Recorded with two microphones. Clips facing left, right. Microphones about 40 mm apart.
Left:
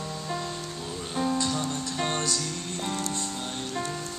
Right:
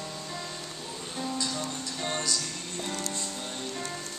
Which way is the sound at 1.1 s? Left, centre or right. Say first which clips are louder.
Left 6 dB; left.